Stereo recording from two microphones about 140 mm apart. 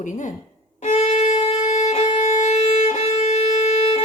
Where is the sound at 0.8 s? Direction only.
55° left (ahead or behind).